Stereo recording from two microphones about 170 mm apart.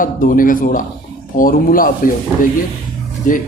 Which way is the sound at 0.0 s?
55° left (ahead or behind).